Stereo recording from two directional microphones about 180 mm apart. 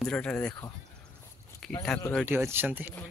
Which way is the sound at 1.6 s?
Centre (ahead or behind).